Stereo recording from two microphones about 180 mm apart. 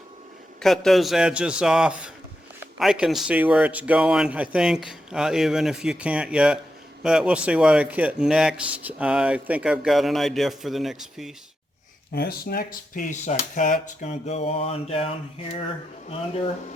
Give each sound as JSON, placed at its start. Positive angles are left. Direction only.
{"t": 0.6, "sound": "speech", "side_deg": 0}
{"t": 12.1, "sound": "speech", "side_deg": 60}